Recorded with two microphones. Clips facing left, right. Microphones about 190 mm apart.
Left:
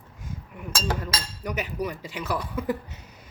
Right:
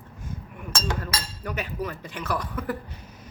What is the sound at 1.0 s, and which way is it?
Speech, 10° left (ahead or behind).